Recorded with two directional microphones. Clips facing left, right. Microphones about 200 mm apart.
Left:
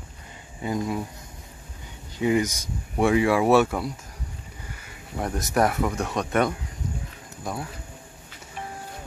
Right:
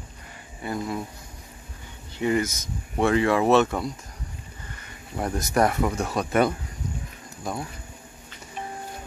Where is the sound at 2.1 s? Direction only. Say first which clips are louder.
Left 1 dB; 15° left (ahead or behind).